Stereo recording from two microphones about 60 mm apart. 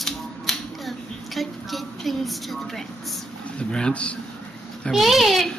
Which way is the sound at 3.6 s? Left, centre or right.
Centre.